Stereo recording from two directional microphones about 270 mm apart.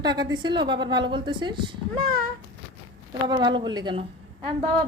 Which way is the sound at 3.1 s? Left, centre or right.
Centre.